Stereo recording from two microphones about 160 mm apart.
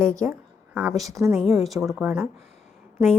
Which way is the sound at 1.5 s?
Centre (ahead or behind).